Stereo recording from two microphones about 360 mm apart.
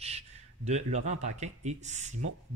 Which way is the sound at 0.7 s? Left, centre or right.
Centre.